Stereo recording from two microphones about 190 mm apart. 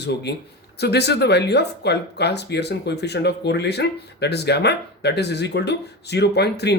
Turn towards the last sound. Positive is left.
turn(degrees=60)  # may be behind; listen again after turning